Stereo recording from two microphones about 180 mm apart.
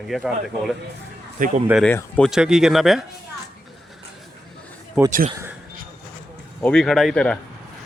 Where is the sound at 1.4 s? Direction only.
50° right (ahead or behind).